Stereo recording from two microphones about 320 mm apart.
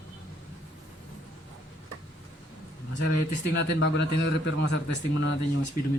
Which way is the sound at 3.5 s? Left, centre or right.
Left.